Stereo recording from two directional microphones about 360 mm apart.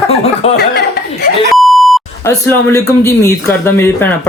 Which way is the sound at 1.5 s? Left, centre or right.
Centre.